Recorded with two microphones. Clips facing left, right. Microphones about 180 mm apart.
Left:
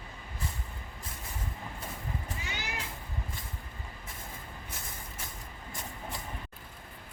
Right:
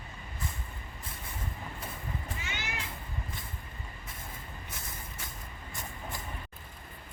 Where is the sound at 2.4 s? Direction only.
40° left (ahead or behind).